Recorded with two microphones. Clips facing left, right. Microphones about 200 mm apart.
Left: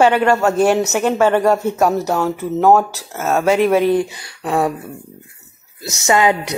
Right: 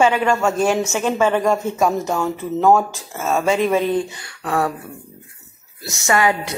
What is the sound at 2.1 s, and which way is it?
Speech, 5° left (ahead or behind).